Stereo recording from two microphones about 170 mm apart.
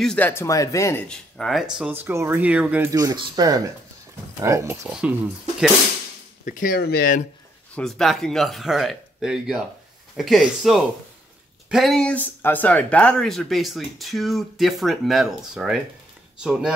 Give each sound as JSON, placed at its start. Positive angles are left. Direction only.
{"t": 0.0, "sound": "speech", "side_deg": 5}
{"t": 1.0, "sound": "speech", "side_deg": 5}
{"t": 1.9, "sound": "speech", "side_deg": -10}
{"t": 2.9, "sound": "speech", "side_deg": -25}
{"t": 6.4, "sound": "speech", "side_deg": 50}
{"t": 7.7, "sound": "speech", "side_deg": 0}